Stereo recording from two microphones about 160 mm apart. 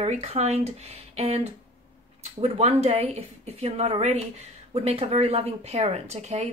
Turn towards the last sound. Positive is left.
turn(degrees=-45)  # may be behind; listen again after turning